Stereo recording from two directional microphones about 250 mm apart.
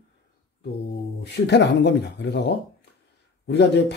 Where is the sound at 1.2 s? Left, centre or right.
Left.